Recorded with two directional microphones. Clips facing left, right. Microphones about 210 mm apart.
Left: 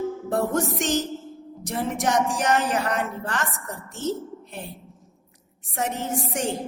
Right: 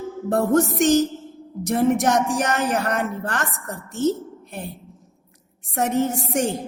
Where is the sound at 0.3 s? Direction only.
45° right (ahead or behind).